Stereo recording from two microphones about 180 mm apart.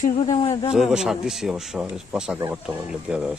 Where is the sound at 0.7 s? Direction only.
5° right (ahead or behind).